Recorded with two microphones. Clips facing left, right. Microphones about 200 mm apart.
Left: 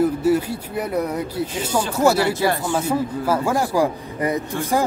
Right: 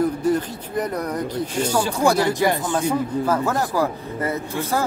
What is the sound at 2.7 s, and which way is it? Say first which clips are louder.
Speech: even; 10° left (ahead or behind).